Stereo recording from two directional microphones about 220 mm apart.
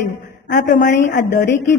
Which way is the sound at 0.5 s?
35° left (ahead or behind).